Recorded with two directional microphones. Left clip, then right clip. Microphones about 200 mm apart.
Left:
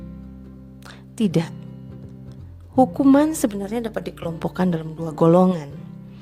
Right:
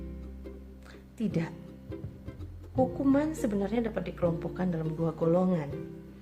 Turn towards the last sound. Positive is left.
turn(degrees=50)  # may be behind; listen again after turning